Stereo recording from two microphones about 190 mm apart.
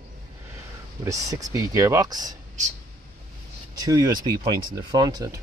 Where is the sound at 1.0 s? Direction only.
15° right (ahead or behind).